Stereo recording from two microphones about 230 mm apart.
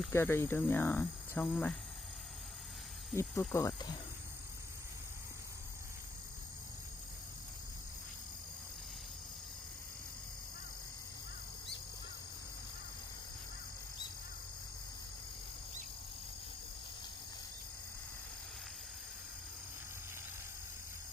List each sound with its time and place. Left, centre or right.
0.1 s speech: centre
3.2 s speech: centre